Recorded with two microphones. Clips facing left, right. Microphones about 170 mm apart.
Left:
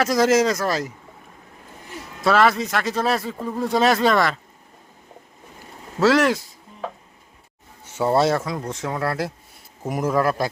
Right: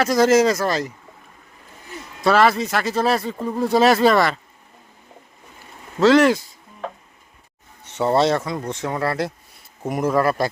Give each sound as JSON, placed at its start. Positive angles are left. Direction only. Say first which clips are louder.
{"t": 0.0, "sound": "speech", "louder": "right 2 dB", "side_deg": 0}
{"t": 2.2, "sound": "speech", "louder": "right 1 dB", "side_deg": 0}
{"t": 6.0, "sound": "speech", "louder": "right 3 dB", "side_deg": 0}